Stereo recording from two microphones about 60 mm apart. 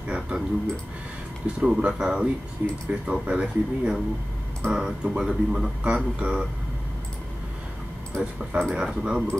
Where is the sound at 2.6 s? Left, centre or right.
Right.